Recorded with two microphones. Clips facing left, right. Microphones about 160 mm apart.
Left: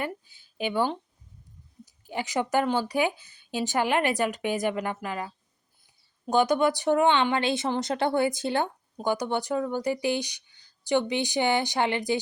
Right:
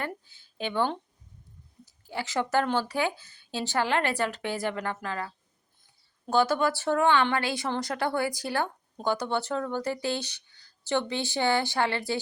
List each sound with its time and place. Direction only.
0.0 s a sound: 15° left (ahead or behind)
1.8 s speech: 15° left (ahead or behind)
6.3 s speech: 15° left (ahead or behind)